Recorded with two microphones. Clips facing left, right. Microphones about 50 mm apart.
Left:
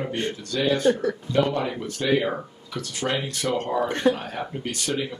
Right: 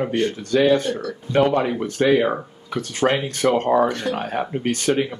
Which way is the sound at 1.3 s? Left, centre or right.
Right.